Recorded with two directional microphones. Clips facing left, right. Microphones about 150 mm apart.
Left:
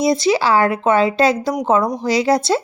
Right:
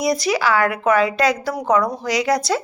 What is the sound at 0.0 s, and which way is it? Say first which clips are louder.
Speech: left 3 dB; 25° left (ahead or behind).